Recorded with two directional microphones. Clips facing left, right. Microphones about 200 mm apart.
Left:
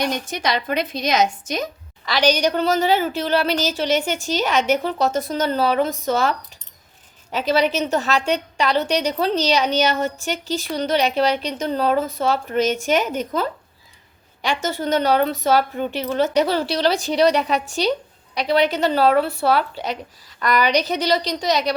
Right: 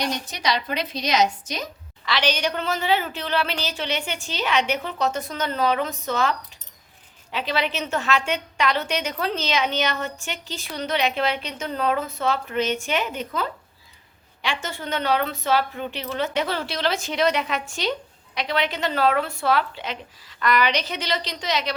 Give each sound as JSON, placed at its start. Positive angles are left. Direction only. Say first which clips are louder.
{"t": 0.0, "sound": "a woman's voice", "louder": "left 3 dB", "side_deg": 50}